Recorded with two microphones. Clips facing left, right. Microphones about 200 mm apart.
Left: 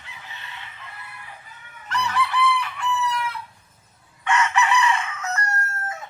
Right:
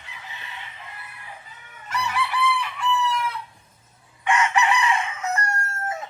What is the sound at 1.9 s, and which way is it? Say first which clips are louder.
Chicken: left 2 dB; 10° right (ahead or behind).